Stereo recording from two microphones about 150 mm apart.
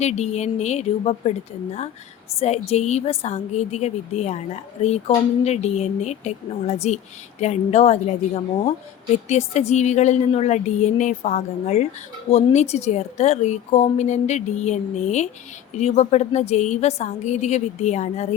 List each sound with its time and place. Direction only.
0.0 s speech: 50° left (ahead or behind)
2.4 s speech: 45° left (ahead or behind)
9.1 s speech: 45° left (ahead or behind)